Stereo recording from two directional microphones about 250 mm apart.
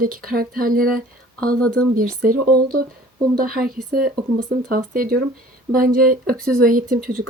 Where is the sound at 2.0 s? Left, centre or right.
Right.